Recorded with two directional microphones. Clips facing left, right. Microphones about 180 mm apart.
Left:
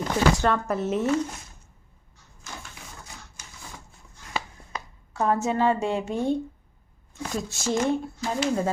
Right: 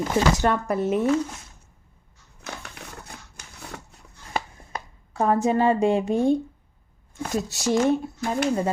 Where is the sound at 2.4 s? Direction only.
65° right (ahead or behind).